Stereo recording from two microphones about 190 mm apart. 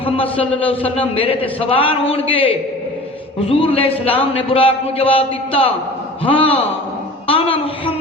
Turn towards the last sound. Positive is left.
turn(degrees=30)  # may be behind; listen again after turning